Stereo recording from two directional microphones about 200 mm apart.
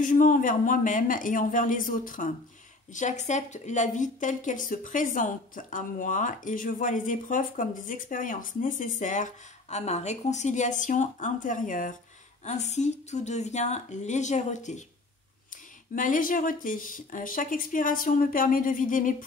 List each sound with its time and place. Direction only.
0.0 s a woman's voice: 40° left (ahead or behind)
15.9 s speech: 40° left (ahead or behind)